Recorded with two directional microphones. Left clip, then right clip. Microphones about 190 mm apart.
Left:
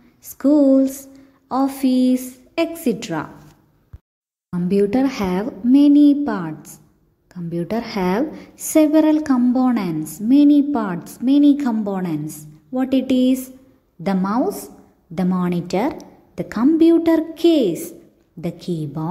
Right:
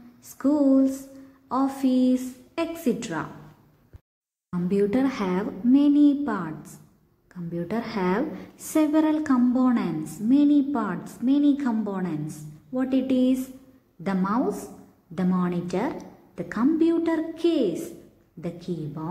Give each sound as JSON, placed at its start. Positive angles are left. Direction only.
{"t": 0.2, "sound": "a woman's voice", "side_deg": 25}
{"t": 4.5, "sound": "a woman's voice", "side_deg": 25}